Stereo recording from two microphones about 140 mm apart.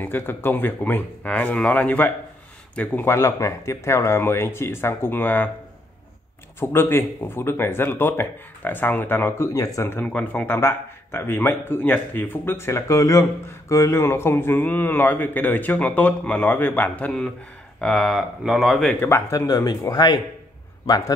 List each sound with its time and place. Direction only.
0.0 s speech: 15° left (ahead or behind)
6.6 s speech: 15° left (ahead or behind); by 18.9 s centre (ahead or behind)
18.9 s speech: 15° left (ahead or behind)